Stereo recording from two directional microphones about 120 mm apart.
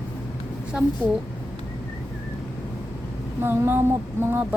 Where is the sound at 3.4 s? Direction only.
20° right (ahead or behind).